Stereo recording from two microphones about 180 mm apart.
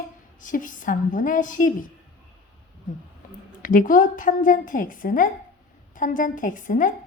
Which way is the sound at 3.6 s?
50° left (ahead or behind).